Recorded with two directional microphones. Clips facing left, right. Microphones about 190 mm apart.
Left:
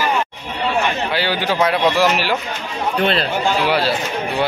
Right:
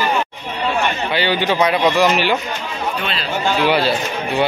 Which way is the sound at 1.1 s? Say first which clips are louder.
Right 4 dB; 5° left (ahead or behind).